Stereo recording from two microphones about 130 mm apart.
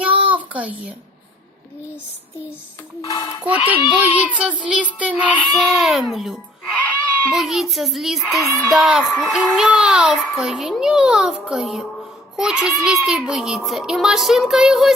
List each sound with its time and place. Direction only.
0.0 s child singing: 10° right (ahead or behind)
3.0 s speech: 25° left (ahead or behind)
3.7 s child singing: 10° right (ahead or behind)
5.6 s a child's voice: centre (ahead or behind)